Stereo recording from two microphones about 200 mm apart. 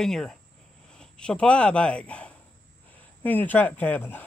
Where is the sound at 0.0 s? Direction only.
Centre (ahead or behind).